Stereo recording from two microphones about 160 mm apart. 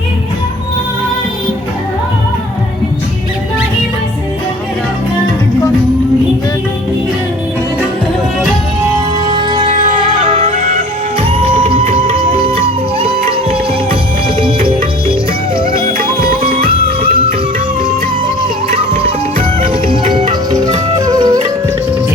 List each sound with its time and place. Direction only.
9.2 s music: 30° right (ahead or behind)
11.2 s music: 40° right (ahead or behind)
14.7 s music: 35° right (ahead or behind)
15.9 s music: 65° right (ahead or behind)
18.7 s music: 35° right (ahead or behind)